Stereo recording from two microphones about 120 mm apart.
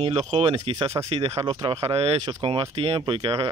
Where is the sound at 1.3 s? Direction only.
30° right (ahead or behind).